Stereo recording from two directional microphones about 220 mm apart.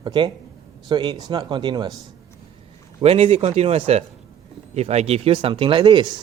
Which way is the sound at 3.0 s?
25° right (ahead or behind).